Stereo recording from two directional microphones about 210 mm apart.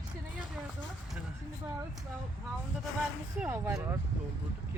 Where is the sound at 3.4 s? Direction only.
10° right (ahead or behind).